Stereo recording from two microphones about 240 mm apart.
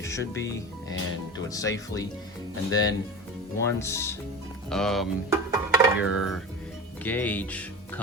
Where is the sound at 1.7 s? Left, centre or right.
Centre.